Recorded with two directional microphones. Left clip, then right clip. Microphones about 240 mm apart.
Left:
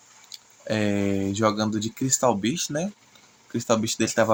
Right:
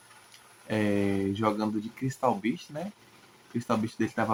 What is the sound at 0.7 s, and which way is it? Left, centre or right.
Speech, left.